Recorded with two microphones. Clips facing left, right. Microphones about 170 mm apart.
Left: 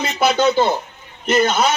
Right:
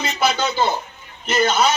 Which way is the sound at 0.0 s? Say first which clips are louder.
Left 5 dB; 55° left (ahead or behind).